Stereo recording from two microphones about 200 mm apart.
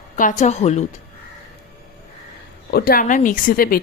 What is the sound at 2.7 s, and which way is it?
A woman's voice, 50° left (ahead or behind).